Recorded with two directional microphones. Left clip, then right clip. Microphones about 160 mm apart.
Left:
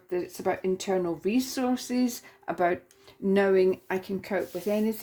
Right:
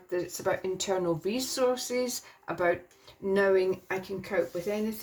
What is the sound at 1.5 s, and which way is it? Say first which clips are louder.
Speech: right 2 dB; 60° left (ahead or behind).